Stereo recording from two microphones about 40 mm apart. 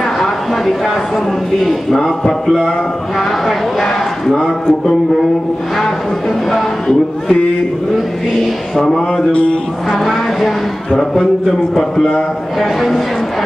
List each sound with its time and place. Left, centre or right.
1.6 s a man's voice: centre
6.9 s a man's voice: centre
9.3 s mantra: left
9.8 s speech: centre
12.5 s speech: centre